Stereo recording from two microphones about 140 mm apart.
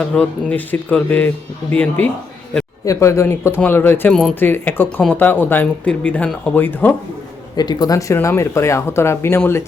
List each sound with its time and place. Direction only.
0.0 s speech: 10° left (ahead or behind)
2.8 s speech: 20° left (ahead or behind)
4.1 s speech: 5° left (ahead or behind)
4.4 s speech: 15° left (ahead or behind)
7.5 s speech: 30° left (ahead or behind)